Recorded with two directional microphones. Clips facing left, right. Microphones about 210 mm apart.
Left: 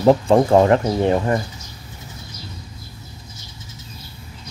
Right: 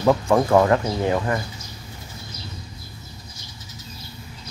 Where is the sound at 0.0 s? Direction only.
30° left (ahead or behind).